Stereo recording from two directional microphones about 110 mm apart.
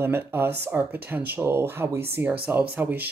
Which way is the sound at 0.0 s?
20° right (ahead or behind).